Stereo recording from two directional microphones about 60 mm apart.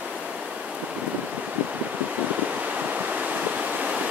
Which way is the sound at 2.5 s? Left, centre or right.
Right.